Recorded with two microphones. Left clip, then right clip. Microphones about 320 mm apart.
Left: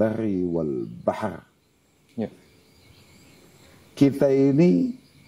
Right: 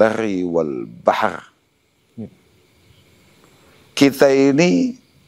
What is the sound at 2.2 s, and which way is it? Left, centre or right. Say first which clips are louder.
Speech: left 5 dB; left.